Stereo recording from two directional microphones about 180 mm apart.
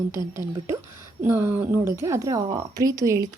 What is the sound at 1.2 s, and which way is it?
A woman's voice, 10° right (ahead or behind).